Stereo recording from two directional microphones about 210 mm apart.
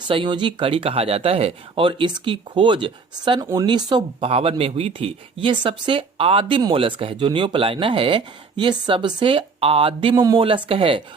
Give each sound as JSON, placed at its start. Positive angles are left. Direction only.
{"t": 0.1, "sound": "speech", "side_deg": -25}